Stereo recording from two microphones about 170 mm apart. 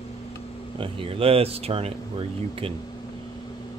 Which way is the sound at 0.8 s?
35° right (ahead or behind).